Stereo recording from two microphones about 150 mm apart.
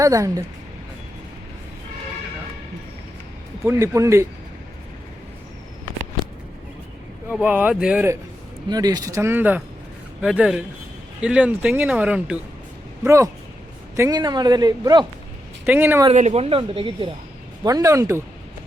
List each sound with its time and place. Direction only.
0.0 s a man's voice: 20° right (ahead or behind)
3.6 s a man's voice: 20° right (ahead or behind)
7.3 s speech: 10° right (ahead or behind)
8.7 s a man's voice: 25° right (ahead or behind); by 12.4 s 10° right (ahead or behind)
13.1 s a man's voice: 20° right (ahead or behind)
15.6 s speech: 15° right (ahead or behind)
16.1 s speech: 50° right (ahead or behind)
17.6 s a man's voice: 25° right (ahead or behind)